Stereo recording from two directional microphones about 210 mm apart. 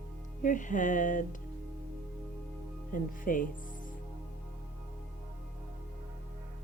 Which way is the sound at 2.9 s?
40° left (ahead or behind).